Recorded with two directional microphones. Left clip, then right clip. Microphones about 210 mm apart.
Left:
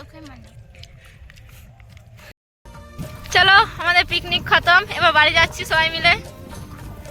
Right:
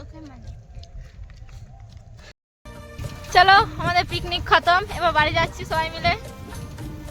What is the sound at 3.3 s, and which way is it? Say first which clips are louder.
Speech: left 1 dB; centre (ahead or behind).